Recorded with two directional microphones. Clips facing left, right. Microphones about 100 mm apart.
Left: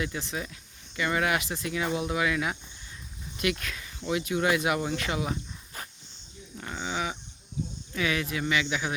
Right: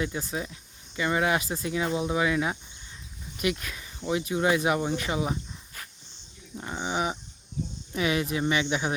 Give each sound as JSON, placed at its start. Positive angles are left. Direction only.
{"t": 0.3, "sound": "speech", "side_deg": -25}
{"t": 6.6, "sound": "a sound", "side_deg": -20}
{"t": 7.9, "sound": "speech", "side_deg": -25}